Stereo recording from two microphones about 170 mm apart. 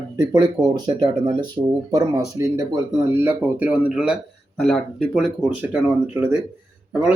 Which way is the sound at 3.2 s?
10° right (ahead or behind).